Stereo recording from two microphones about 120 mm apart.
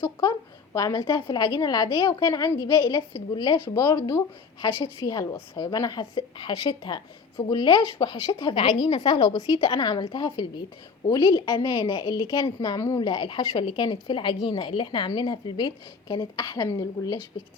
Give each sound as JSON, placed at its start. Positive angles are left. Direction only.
{"t": 0.0, "sound": "a woman's voice", "side_deg": 30}
{"t": 11.5, "sound": "a woman's voice", "side_deg": 45}
{"t": 11.8, "sound": "a woman's voice", "side_deg": 35}